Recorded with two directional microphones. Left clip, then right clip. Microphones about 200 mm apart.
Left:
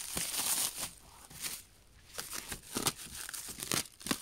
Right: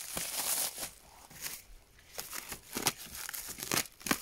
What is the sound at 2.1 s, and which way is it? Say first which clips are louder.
Crumpling: even; 20° left (ahead or behind).